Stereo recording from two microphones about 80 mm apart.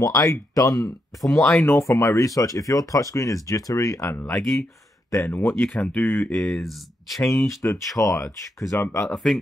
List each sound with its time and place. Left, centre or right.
0.0 s speech: left
1.4 s speech: left
1.8 s speech: left
4.3 s speech: centre
5.9 s speech: left
6.3 s speech: centre
7.4 s speech: left
9.1 s speech: centre